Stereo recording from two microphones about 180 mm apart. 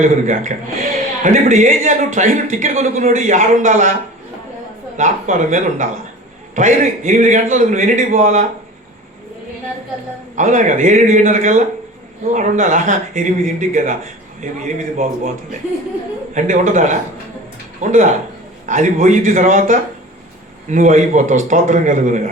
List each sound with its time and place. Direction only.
0.0 s a man's voice: 45° right (ahead or behind)
4.9 s a man's voice: 45° right (ahead or behind)
10.3 s a man's voice: 45° right (ahead or behind)
16.3 s a man's voice: 45° right (ahead or behind)